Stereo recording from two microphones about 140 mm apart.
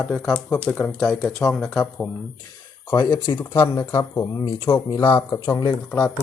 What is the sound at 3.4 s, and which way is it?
Speech, 20° left (ahead or behind).